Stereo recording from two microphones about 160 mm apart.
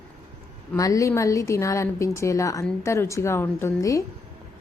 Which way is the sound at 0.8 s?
20° left (ahead or behind).